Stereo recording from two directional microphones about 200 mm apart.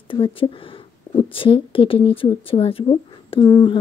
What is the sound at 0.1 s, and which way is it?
Speech, 25° left (ahead or behind).